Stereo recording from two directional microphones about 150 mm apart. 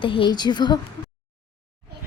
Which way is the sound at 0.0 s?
35° left (ahead or behind).